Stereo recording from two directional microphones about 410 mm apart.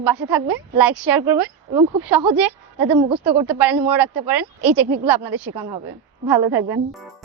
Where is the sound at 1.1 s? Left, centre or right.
Centre.